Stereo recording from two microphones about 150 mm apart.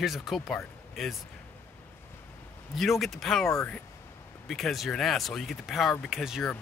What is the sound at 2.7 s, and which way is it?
Speech, centre (ahead or behind).